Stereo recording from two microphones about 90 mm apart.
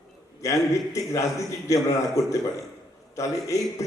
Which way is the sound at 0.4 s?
35° left (ahead or behind).